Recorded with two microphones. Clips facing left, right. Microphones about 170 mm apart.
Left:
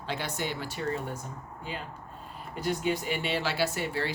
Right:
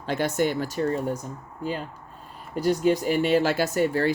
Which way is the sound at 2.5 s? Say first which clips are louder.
Right 8 dB; 40° right (ahead or behind).